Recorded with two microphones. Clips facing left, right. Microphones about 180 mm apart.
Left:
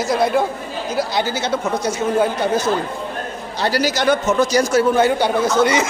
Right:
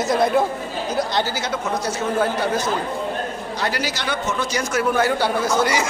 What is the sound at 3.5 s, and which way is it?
A man's voice, 35° left (ahead or behind).